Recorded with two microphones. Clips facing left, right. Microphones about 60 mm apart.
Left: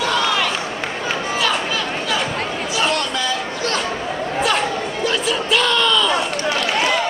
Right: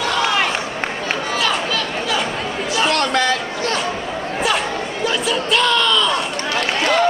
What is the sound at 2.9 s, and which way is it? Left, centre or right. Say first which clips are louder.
Chatter: right 4 dB; right.